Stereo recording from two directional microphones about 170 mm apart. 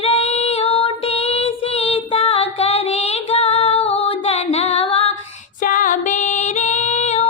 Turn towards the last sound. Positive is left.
turn(degrees=40)  # may be behind; listen again after turning